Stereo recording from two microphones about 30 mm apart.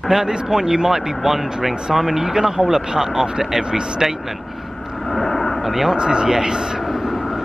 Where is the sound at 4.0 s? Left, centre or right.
Centre.